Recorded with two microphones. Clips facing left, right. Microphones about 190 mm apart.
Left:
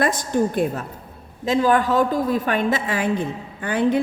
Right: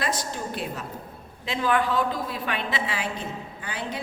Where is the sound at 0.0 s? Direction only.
50° left (ahead or behind).